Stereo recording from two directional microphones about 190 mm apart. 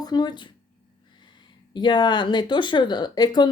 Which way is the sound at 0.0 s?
20° left (ahead or behind).